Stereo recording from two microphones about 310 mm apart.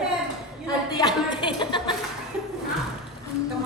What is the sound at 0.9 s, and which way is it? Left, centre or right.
Chuckle, centre.